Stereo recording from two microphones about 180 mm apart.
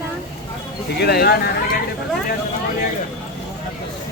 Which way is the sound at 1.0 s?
60° left (ahead or behind).